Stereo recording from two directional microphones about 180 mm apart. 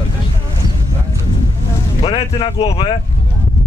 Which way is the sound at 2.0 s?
30° left (ahead or behind).